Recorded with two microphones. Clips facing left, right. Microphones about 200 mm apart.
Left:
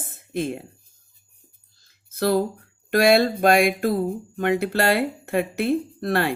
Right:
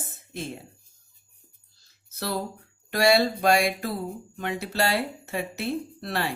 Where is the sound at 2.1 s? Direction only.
55° left (ahead or behind).